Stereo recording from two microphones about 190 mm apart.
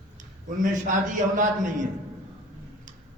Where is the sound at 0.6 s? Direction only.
45° right (ahead or behind).